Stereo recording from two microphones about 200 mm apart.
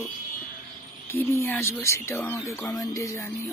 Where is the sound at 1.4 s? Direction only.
10° left (ahead or behind).